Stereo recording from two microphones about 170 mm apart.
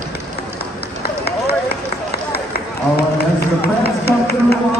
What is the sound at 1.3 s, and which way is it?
Run, 70° left (ahead or behind).